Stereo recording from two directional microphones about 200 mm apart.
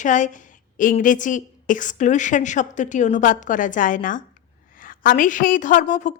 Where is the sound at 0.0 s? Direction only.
40° left (ahead or behind).